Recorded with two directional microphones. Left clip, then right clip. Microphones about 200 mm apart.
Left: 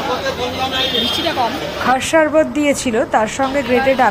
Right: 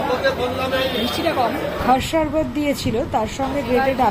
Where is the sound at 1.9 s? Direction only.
15° left (ahead or behind).